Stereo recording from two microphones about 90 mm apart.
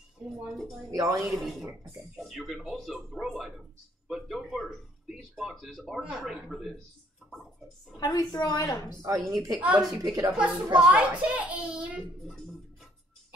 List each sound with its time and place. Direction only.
0.2 s music: 15° right (ahead or behind)
0.9 s a woman's voice: 45° right (ahead or behind)
1.2 s speech: centre (ahead or behind)
8.0 s a woman's voice: 45° left (ahead or behind)
9.0 s a woman's voice: 45° right (ahead or behind)
9.6 s a child's voice: 15° right (ahead or behind)